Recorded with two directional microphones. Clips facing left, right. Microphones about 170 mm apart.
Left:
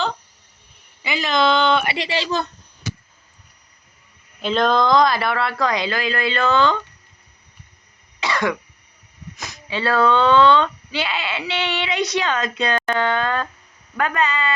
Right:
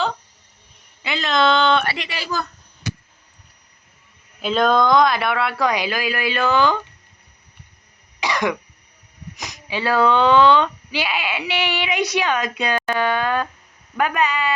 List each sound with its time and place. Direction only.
1.0 s speech: centre (ahead or behind)
2.0 s speech: 25° left (ahead or behind)
4.4 s speech: 5° right (ahead or behind)
8.2 s cough: 15° right (ahead or behind)
9.3 s speech: 15° right (ahead or behind)